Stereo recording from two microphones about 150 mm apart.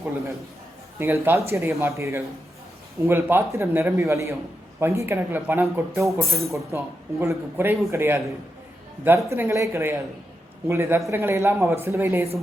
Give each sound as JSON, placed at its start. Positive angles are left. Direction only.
{"t": 0.9, "sound": "speech", "side_deg": -15}